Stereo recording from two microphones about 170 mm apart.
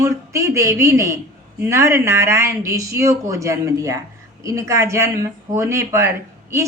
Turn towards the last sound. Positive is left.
turn(degrees=-15)  # may be behind; listen again after turning